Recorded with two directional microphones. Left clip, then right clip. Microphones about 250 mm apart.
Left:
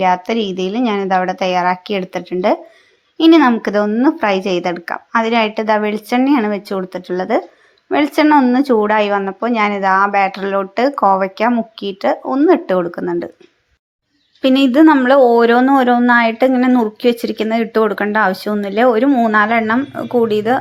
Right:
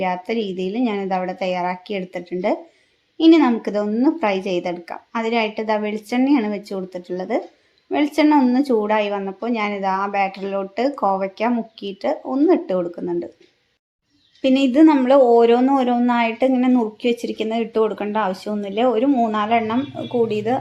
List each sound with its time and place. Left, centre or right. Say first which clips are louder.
0.0 s a woman's voice: left 7 dB; centre
14.4 s a woman's voice: left 4 dB; centre